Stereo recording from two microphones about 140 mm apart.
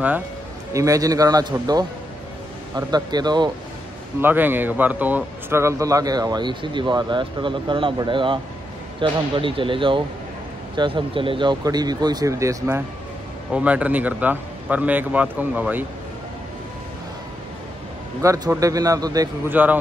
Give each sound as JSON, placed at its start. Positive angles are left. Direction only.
{"t": 0.7, "sound": "speech", "side_deg": -25}
{"t": 2.7, "sound": "speech", "side_deg": -30}
{"t": 4.2, "sound": "speech", "side_deg": -15}
{"t": 13.5, "sound": "speech", "side_deg": -10}
{"t": 18.2, "sound": "speech", "side_deg": -20}
{"t": 19.5, "sound": "speech", "side_deg": -10}